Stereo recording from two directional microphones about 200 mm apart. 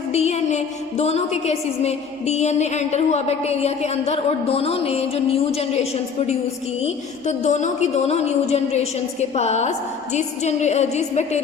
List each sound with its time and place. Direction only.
0.1 s a woman's voice: 35° left (ahead or behind)